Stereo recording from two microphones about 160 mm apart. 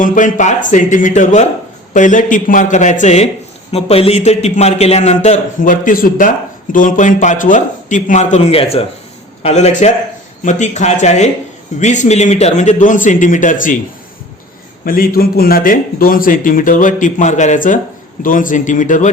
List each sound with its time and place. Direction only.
0.0 s a man's voice: 55° left (ahead or behind)
14.8 s a man's voice: 65° left (ahead or behind)